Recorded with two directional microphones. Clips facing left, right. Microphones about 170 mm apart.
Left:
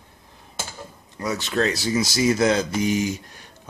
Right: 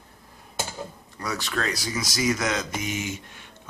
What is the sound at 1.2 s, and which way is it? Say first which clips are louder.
Speech: left 6 dB; 20° left (ahead or behind).